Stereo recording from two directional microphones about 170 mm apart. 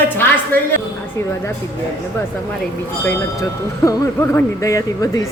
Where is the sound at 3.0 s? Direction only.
15° left (ahead or behind).